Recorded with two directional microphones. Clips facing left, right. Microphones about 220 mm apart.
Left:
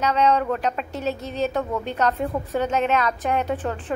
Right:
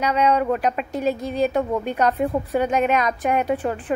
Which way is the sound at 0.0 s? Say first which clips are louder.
Right 1 dB; 10° right (ahead or behind).